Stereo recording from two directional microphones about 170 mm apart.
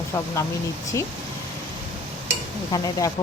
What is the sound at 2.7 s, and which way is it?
Speech, 20° left (ahead or behind).